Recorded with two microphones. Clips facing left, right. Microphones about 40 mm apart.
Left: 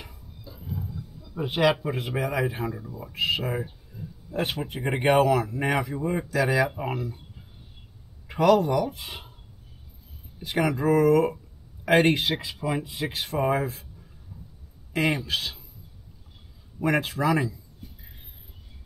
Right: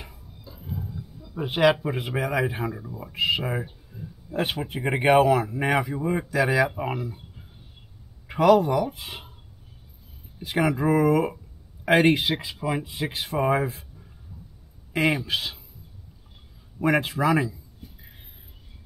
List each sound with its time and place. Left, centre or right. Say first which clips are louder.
0.0 s a sound: even; centre
1.2 s speech: right 2 dB; centre
8.3 s speech: right 2 dB; centre
10.4 s a man's voice: right 1 dB; centre
16.8 s speech: right 2 dB; centre